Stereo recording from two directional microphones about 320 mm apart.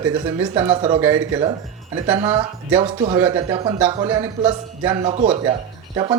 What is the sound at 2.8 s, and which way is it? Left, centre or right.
Speech, centre.